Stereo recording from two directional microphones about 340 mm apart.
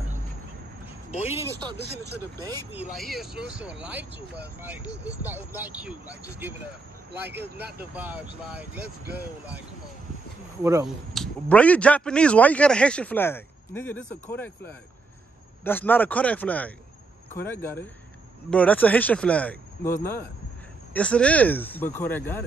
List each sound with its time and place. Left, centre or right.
1.3 s a man's voice: centre
7.2 s speech: right
7.9 s a man's voice: centre
10.6 s speech: centre
11.4 s a man's voice: centre